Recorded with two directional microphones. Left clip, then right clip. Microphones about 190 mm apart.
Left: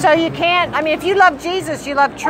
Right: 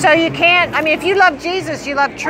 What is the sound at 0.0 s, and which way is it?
Speech, 10° left (ahead or behind).